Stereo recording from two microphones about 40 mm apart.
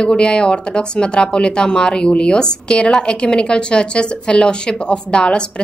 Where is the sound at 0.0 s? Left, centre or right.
Left.